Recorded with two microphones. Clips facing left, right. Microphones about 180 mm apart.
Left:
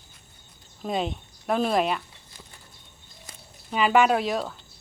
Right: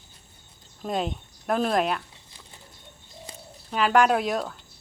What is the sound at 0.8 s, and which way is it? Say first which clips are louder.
Speech: even; centre (ahead or behind).